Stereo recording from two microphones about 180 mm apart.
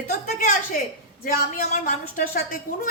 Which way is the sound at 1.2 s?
50° left (ahead or behind).